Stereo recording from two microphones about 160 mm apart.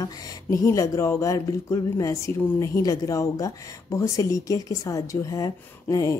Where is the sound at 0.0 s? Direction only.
20° left (ahead or behind).